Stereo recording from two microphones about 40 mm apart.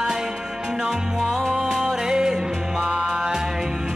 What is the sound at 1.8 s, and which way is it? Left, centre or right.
Music, centre.